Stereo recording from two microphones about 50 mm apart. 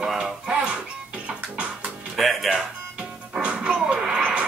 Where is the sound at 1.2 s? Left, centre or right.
Right.